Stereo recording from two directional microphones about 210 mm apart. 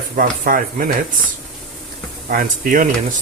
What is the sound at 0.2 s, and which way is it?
Speech, 40° right (ahead or behind).